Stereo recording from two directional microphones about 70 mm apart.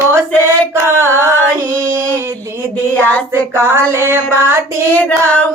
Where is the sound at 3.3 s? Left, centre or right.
Right.